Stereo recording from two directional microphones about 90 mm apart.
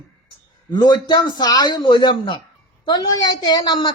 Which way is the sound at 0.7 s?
55° left (ahead or behind).